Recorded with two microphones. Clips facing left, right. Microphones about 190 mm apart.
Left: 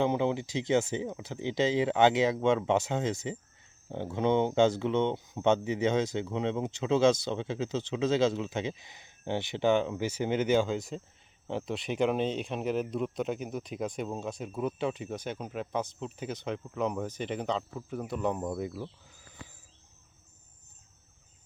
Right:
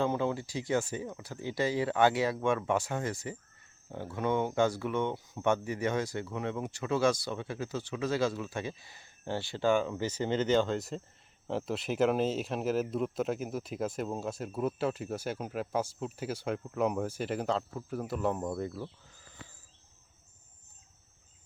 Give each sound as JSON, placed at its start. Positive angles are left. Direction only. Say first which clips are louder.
{"t": 0.0, "sound": "speech", "louder": "left 3 dB", "side_deg": 20}